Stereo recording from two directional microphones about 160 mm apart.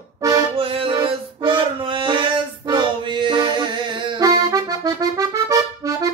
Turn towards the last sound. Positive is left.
turn(degrees=-20)  # may be behind; listen again after turning